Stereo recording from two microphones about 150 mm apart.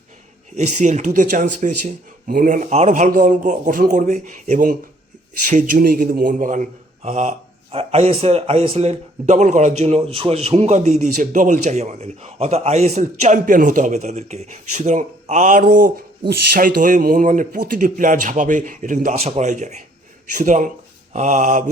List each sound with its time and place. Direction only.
0.5 s speech: 50° right (ahead or behind)
3.1 s a man's voice: 60° right (ahead or behind)